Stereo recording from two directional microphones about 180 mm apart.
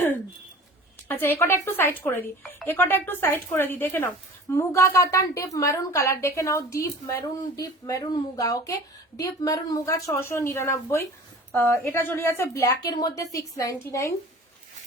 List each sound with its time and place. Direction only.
1.0 s a woman's voice: 10° left (ahead or behind)